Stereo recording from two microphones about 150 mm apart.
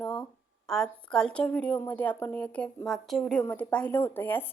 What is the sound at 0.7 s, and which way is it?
A woman's voice, 5° left (ahead or behind).